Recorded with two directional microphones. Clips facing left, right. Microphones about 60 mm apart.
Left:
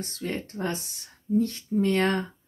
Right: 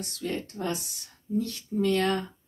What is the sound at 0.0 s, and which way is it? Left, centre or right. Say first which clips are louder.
Speech: even; left.